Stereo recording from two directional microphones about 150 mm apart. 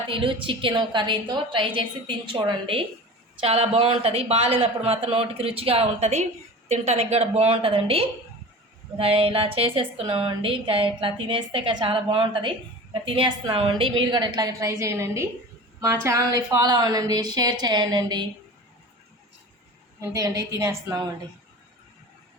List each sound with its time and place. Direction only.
0.1 s a woman's voice: 35° right (ahead or behind)
20.0 s a woman's voice: 20° right (ahead or behind)